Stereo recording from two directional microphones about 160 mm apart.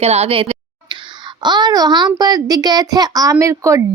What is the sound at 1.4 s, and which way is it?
Speech, 25° right (ahead or behind).